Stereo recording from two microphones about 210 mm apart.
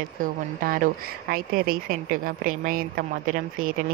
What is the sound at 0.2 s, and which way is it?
A woman's voice, 40° right (ahead or behind).